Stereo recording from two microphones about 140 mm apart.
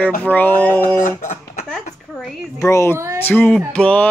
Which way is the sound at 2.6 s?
20° left (ahead or behind).